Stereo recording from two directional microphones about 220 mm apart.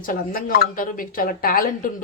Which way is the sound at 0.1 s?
40° left (ahead or behind).